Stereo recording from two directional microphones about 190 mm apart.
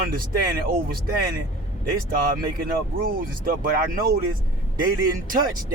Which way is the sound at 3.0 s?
50° right (ahead or behind).